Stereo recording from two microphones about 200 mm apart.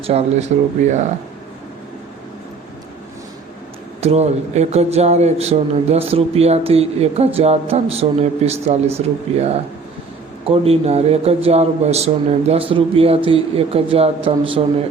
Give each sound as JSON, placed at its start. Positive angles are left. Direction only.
{"t": 0.0, "sound": "speech", "side_deg": -30}
{"t": 4.0, "sound": "speech", "side_deg": -35}